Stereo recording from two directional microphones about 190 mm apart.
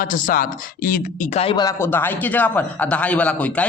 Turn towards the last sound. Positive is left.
turn(degrees=5)  # may be behind; listen again after turning